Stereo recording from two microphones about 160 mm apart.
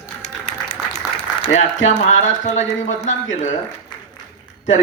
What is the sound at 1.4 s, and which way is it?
Speech, 45° left (ahead or behind).